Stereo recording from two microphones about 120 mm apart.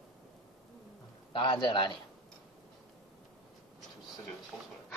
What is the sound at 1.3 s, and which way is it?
Speech, 40° left (ahead or behind).